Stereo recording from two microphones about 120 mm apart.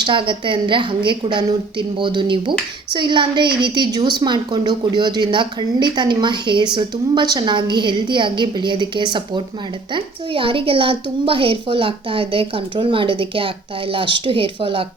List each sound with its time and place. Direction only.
0.0 s a woman's voice: 45° right (ahead or behind)